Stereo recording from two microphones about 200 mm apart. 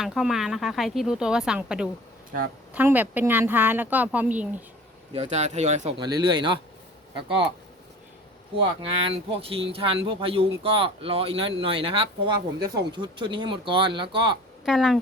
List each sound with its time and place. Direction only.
0.0 s speech: centre (ahead or behind)
5.1 s speech: 35° right (ahead or behind)
6.0 s speech: 20° right (ahead or behind)
8.5 s speech: 25° right (ahead or behind)
14.6 s speech: centre (ahead or behind)